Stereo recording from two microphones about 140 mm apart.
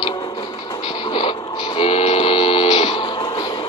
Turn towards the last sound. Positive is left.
turn(degrees=30)  # may be behind; listen again after turning